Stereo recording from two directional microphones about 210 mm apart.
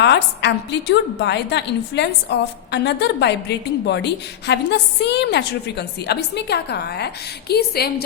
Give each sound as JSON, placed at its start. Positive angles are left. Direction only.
{"t": 0.0, "sound": "a woman's voice", "side_deg": 55}